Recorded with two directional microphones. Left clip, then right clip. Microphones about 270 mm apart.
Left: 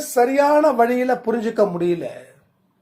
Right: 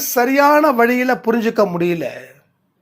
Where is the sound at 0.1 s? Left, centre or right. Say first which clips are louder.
Right 3 dB; right.